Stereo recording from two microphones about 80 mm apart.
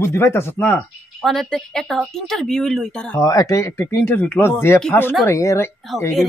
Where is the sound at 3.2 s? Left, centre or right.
Left.